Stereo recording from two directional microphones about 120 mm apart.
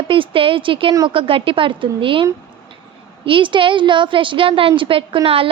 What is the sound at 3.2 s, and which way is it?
A woman's voice, 45° right (ahead or behind).